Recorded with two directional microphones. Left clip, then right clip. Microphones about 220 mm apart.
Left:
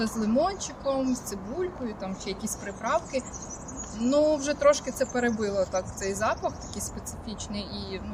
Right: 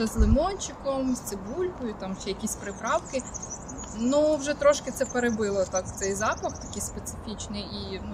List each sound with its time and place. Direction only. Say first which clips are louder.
0.0 s speech: even; 5° right (ahead or behind)